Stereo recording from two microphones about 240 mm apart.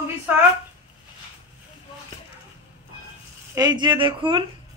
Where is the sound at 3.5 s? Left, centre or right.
Centre.